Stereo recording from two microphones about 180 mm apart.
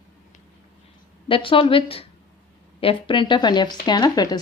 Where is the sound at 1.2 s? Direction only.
30° left (ahead or behind).